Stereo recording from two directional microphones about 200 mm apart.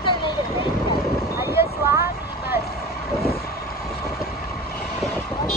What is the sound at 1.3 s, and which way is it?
Vehicle, 15° right (ahead or behind).